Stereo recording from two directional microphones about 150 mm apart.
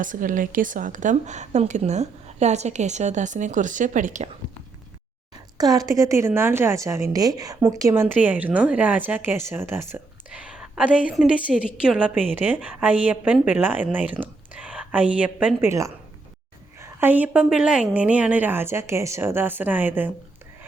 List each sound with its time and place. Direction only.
0.0 s a woman's voice: 65° right (ahead or behind)
5.5 s a woman's voice: 25° right (ahead or behind); by 15.7 s 10° right (ahead or behind)
16.7 s speech: 15° right (ahead or behind)